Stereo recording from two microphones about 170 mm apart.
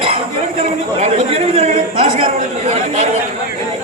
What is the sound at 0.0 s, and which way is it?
A man's voice, 35° right (ahead or behind).